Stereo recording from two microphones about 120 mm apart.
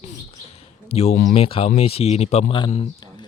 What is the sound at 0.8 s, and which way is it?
Speech, 60° left (ahead or behind).